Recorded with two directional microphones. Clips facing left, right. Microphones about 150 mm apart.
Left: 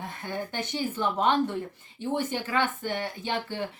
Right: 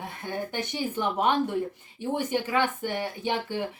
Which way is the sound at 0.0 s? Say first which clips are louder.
Right 1 dB; 15° right (ahead or behind).